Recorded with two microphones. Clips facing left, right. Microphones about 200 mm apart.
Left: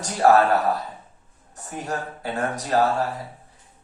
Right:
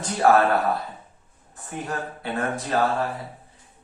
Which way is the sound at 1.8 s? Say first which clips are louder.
Left 1 dB; 40° left (ahead or behind).